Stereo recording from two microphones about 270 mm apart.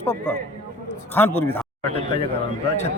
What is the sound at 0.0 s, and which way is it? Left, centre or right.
Speech, centre.